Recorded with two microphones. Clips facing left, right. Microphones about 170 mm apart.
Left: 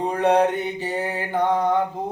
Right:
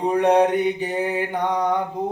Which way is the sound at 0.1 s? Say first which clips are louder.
Right 2 dB; 15° right (ahead or behind).